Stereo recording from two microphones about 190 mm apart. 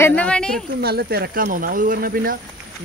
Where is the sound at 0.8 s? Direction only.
55° right (ahead or behind).